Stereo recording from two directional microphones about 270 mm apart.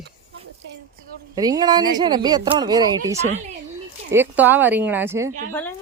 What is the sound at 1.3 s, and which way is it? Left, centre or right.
Speech, centre.